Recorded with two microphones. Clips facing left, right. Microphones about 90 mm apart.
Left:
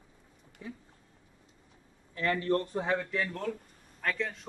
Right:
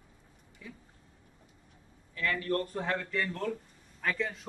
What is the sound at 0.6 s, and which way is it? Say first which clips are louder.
Speech: left 5 dB; 30° left (ahead or behind).